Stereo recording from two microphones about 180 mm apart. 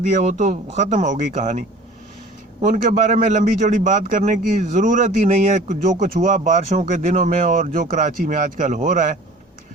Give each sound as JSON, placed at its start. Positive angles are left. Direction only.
{"t": 0.1, "sound": "a man's voice", "side_deg": -40}